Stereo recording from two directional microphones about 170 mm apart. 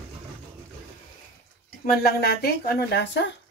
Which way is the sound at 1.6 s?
65° left (ahead or behind).